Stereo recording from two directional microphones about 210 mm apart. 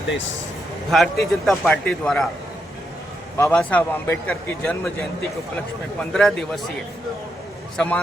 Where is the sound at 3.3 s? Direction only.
5° left (ahead or behind).